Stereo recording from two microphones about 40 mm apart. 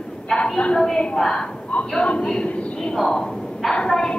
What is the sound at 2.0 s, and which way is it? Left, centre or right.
Speech, left.